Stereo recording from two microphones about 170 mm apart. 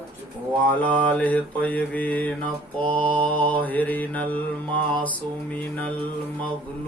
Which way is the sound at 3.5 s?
10° left (ahead or behind).